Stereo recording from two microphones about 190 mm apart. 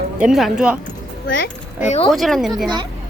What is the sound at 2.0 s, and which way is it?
Speech, centre (ahead or behind).